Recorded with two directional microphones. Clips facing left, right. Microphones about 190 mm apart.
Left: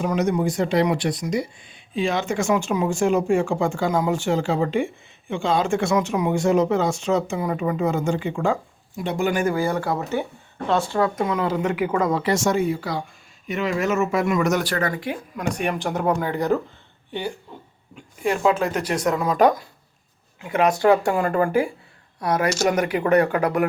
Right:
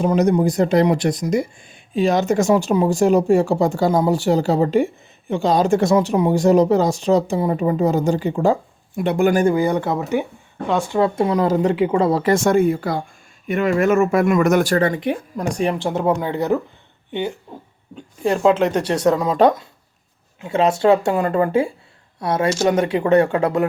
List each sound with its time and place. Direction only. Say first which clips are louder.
0.0 s speech: right 5 dB; 35° right (ahead or behind)
9.0 s speech: right 6 dB; 55° right (ahead or behind)
9.5 s speech: right 4 dB; 20° right (ahead or behind)
11.0 s speech: right 5 dB; 30° right (ahead or behind)
11.7 s speech: right 5 dB; 30° right (ahead or behind)
12.2 s speech: right 5 dB; 55° right (ahead or behind)
14.8 s speech: right 6 dB; 25° right (ahead or behind)
17.9 s speech: right 4 dB; 30° right (ahead or behind)